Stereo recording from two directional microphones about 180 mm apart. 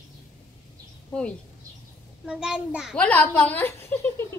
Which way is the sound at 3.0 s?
10° left (ahead or behind).